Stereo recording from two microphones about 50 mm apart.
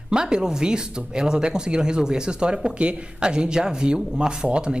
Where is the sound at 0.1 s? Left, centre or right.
Centre.